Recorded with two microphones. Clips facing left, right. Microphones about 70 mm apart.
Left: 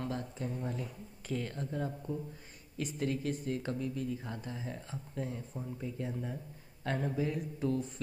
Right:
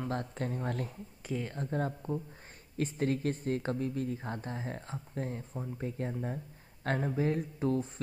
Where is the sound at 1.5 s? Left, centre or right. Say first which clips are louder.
Right 3 dB; right.